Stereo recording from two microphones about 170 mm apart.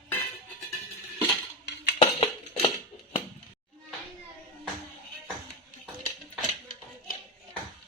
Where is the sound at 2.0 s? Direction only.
35° left (ahead or behind).